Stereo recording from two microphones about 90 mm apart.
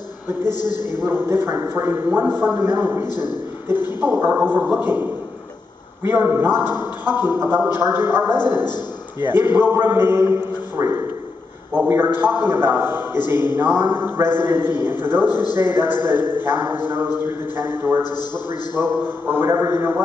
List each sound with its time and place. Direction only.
0.3 s a man's voice: 25° right (ahead or behind)
8.6 s a man's voice: 55° left (ahead or behind)
9.3 s a man's voice: 25° right (ahead or behind)